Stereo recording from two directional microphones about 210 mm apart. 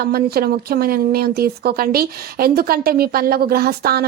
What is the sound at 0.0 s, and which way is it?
A woman's voice, 45° right (ahead or behind).